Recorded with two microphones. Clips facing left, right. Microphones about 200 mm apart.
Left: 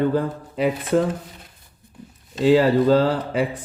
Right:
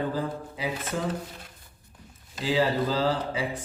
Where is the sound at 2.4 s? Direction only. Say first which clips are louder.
Left 9 dB; 65° left (ahead or behind).